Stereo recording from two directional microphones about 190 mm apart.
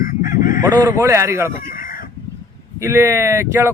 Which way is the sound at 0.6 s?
15° right (ahead or behind).